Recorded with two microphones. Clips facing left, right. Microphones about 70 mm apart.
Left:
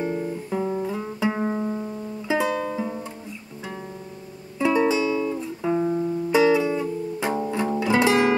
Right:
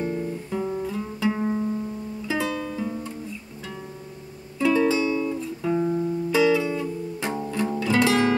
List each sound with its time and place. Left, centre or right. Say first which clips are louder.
0.0 s guitar: left 1 dB; centre
0.9 s music: even; left
4.6 s music: even; left
6.3 s music: left 2 dB; left